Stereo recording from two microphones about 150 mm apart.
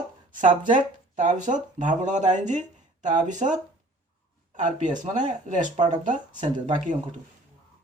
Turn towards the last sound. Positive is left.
turn(degrees=-55)  # may be behind; listen again after turning